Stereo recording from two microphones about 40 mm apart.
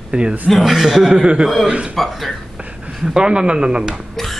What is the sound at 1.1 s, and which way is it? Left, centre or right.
Speech, right.